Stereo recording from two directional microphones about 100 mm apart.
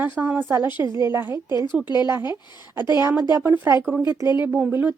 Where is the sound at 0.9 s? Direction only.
50° left (ahead or behind).